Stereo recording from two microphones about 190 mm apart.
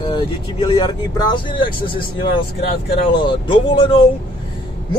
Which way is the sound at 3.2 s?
25° left (ahead or behind).